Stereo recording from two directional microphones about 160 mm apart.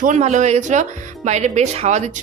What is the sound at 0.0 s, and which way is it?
Speech, 45° right (ahead or behind).